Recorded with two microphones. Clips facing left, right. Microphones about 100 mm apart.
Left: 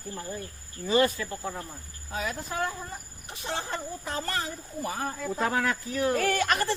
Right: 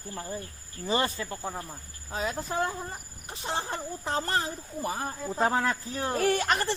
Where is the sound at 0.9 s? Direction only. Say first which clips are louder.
Left 4 dB; 30° right (ahead or behind).